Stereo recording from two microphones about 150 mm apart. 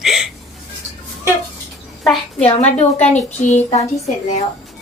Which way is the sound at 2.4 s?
45° left (ahead or behind).